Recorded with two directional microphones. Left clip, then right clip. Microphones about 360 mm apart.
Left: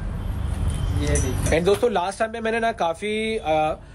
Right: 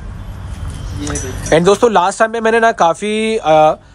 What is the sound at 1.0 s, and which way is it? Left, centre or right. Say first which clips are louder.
Speech: right 3 dB; right.